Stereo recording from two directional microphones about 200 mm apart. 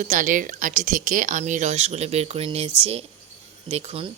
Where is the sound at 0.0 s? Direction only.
40° right (ahead or behind).